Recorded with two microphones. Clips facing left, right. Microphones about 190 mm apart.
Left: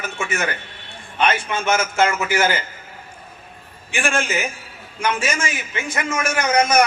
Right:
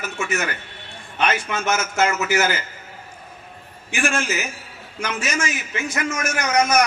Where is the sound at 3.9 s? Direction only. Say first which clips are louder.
Left 1 dB; 55° left (ahead or behind).